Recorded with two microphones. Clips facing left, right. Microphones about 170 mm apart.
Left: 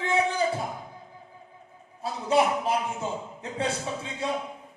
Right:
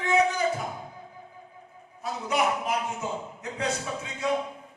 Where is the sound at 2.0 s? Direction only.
30° left (ahead or behind).